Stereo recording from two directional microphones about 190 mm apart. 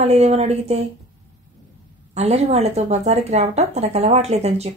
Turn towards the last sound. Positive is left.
turn(degrees=-35)  # may be behind; listen again after turning